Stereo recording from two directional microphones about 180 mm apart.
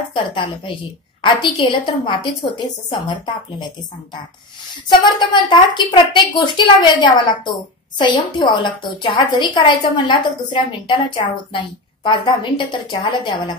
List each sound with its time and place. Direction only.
0.1 s a woman's voice: 25° left (ahead or behind)
4.8 s a woman's voice: 25° left (ahead or behind)